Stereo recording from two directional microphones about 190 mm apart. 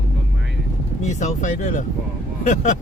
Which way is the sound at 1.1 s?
40° left (ahead or behind).